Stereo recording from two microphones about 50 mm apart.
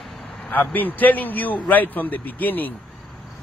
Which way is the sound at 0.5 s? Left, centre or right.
Left.